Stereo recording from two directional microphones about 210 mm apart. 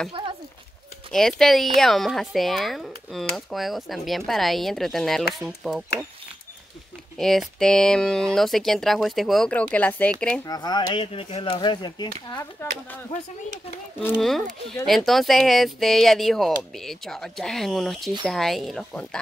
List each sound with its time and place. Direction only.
0.1 s a sound: 25° right (ahead or behind)
1.1 s speech: centre (ahead or behind)
7.2 s speech: centre (ahead or behind)
10.4 s speech: 20° left (ahead or behind)
14.0 s speech: centre (ahead or behind)